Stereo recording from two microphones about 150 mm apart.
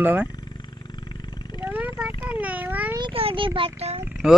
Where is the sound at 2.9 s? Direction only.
35° right (ahead or behind).